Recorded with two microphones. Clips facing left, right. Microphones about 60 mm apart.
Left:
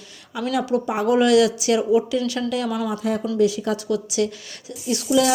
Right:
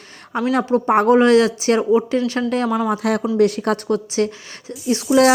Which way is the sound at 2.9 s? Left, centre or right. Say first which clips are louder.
Right 4 dB; right.